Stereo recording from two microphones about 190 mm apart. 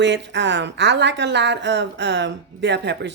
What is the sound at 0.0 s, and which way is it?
A woman's voice, 65° right (ahead or behind).